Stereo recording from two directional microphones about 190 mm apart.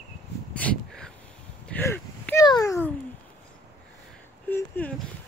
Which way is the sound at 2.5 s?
15° left (ahead or behind).